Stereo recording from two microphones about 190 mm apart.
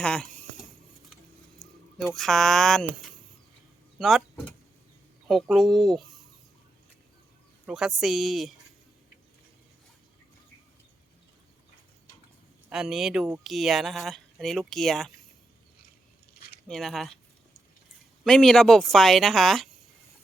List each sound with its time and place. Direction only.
0.0 s a sound: 5° left (ahead or behind)
2.0 s speech: centre (ahead or behind)
3.9 s speech: centre (ahead or behind)
7.7 s speech: 5° right (ahead or behind)
12.7 s speech: 5° right (ahead or behind)
16.6 s speech: centre (ahead or behind)
18.3 s speech: centre (ahead or behind)